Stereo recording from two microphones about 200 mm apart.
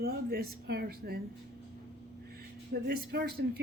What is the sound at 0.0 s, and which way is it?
Speech, 50° right (ahead or behind).